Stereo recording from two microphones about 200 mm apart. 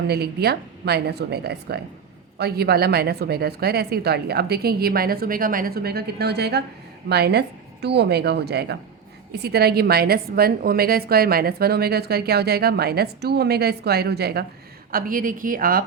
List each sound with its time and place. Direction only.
0.1 s a woman's voice: 55° right (ahead or behind)